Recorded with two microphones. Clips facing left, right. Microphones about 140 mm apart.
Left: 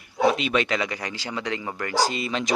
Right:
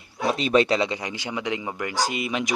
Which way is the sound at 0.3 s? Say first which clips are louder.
Right 3 dB; 35° right (ahead or behind).